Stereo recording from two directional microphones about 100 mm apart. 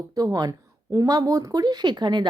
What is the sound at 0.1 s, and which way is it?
A woman's voice, 40° right (ahead or behind).